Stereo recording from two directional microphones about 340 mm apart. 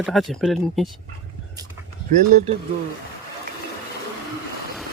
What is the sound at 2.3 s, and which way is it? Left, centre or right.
Speech, centre.